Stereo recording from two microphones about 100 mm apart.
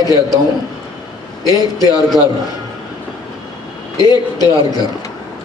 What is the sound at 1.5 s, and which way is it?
Speech, 40° left (ahead or behind).